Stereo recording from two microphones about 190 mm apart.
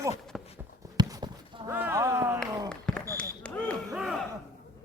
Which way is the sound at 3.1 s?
5° left (ahead or behind).